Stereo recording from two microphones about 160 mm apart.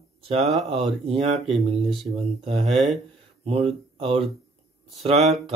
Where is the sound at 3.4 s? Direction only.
40° right (ahead or behind).